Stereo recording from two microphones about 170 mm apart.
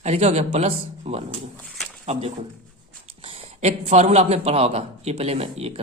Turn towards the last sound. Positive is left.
turn(degrees=-35)  # may be behind; listen again after turning